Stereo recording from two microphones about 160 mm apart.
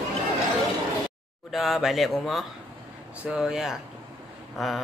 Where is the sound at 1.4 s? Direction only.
Centre (ahead or behind).